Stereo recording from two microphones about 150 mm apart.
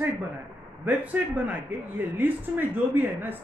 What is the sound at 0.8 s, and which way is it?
Speech, 10° right (ahead or behind).